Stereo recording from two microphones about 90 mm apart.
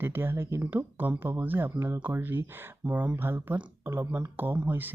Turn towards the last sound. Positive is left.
turn(degrees=-20)  # may be behind; listen again after turning